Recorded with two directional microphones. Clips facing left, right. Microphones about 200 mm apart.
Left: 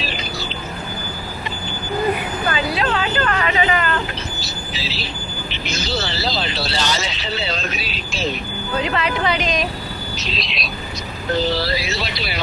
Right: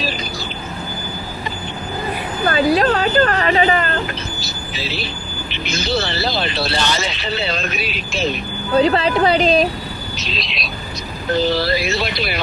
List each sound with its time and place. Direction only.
2.5 s speech: 40° right (ahead or behind)
4.4 s vehicle: 55° right (ahead or behind)
5.5 s speech: 60° right (ahead or behind)
8.8 s speech: 35° right (ahead or behind)
10.3 s speech: centre (ahead or behind)
11.6 s speech: 55° right (ahead or behind)